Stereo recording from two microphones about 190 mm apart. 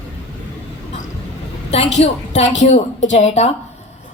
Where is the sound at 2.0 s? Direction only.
35° left (ahead or behind).